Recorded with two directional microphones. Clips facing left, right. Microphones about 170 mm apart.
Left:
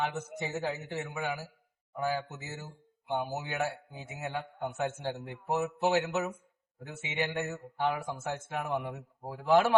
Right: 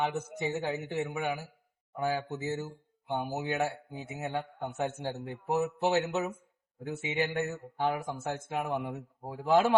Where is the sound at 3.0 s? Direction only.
20° right (ahead or behind).